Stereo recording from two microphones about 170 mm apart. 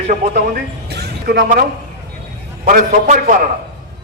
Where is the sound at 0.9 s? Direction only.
75° right (ahead or behind).